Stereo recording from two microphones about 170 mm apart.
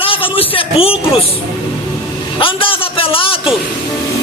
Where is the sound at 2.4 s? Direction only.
30° left (ahead or behind).